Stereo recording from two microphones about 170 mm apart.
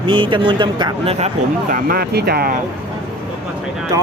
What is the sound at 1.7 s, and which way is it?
Speech, 60° right (ahead or behind).